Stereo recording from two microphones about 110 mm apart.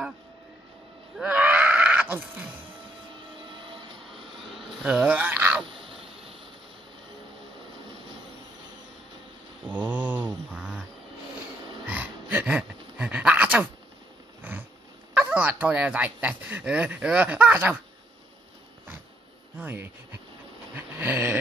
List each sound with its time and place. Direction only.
1.1 s a sound: 10° right (ahead or behind)
4.1 s vehicle: centre (ahead or behind)
4.8 s speech: 10° right (ahead or behind)
5.7 s a sound: 55° right (ahead or behind)
9.7 s mantra: 15° right (ahead or behind)
11.9 s a sound: 15° right (ahead or behind)
15.1 s speech: 15° right (ahead or behind)
19.6 s speech: 15° right (ahead or behind)
20.7 s dog: 15° right (ahead or behind)